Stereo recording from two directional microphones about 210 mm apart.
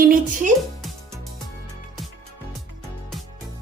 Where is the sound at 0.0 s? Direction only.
40° right (ahead or behind).